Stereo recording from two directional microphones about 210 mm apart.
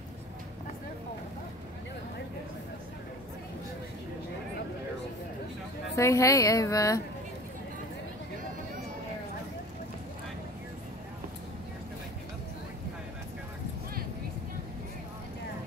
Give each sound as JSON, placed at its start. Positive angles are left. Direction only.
{"t": 5.9, "sound": "a woman's voice", "side_deg": 15}